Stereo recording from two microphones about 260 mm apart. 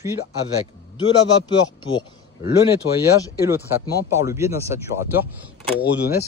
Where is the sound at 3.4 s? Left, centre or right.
Centre.